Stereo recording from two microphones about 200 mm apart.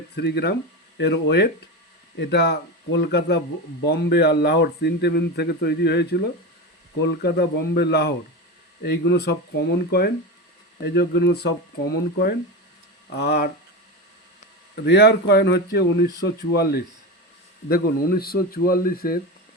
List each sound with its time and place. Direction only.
0.2 s speech: 55° left (ahead or behind)
14.8 s speech: 55° left (ahead or behind)